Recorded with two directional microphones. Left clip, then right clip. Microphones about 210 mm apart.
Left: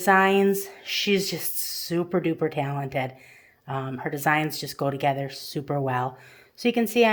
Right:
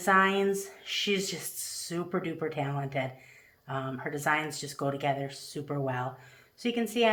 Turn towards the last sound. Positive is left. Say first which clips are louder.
# left 6 dB
turn(degrees=50)  # may be behind; listen again after turning